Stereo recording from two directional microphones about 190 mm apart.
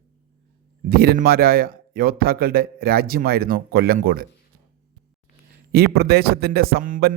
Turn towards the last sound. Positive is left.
turn(degrees=-50)  # may be behind; listen again after turning